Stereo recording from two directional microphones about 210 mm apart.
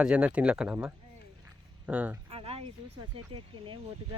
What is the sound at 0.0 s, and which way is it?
Speech, 5° right (ahead or behind).